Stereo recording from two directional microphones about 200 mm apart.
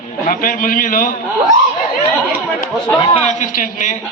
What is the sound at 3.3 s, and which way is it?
Speech, 40° left (ahead or behind).